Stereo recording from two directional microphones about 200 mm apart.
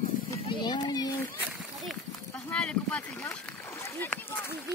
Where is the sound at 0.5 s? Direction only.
20° left (ahead or behind).